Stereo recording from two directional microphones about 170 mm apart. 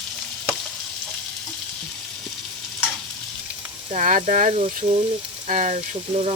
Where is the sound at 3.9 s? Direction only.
50° right (ahead or behind).